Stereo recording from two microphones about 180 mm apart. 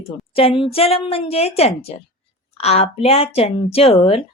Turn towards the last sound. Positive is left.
turn(degrees=30)  # may be behind; listen again after turning